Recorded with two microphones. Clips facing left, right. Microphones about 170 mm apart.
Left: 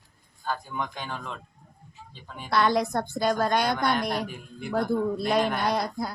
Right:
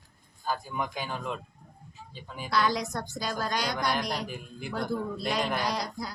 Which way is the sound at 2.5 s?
55° left (ahead or behind).